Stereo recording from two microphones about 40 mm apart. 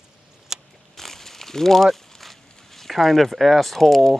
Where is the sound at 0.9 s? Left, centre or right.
Centre.